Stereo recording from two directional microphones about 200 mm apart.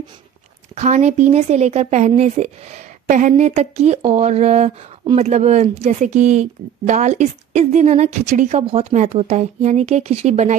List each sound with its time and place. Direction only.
0.7 s speech: 35° right (ahead or behind)